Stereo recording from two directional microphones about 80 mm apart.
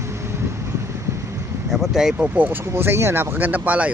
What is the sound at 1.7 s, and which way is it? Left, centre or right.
Speech, centre.